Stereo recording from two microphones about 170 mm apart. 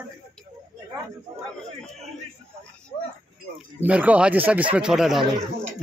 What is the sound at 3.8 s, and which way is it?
A man's voice, 10° right (ahead or behind).